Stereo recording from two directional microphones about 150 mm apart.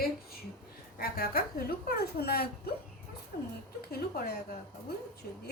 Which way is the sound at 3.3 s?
75° left (ahead or behind).